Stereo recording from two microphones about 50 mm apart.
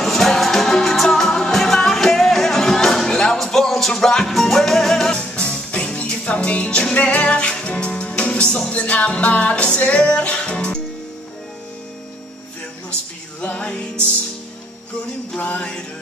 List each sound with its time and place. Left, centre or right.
0.0 s music: centre
5.3 s music: centre
13.4 s music: left
15.3 s music: left